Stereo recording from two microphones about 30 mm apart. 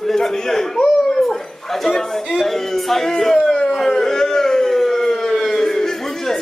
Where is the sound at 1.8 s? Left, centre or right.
Centre.